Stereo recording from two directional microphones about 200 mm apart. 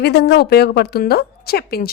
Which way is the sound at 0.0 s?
55° left (ahead or behind).